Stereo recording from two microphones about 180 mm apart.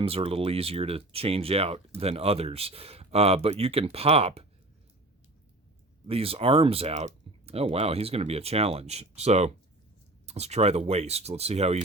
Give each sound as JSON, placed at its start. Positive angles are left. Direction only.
{"t": 0.0, "sound": "speech", "side_deg": -30}
{"t": 6.1, "sound": "speech", "side_deg": -30}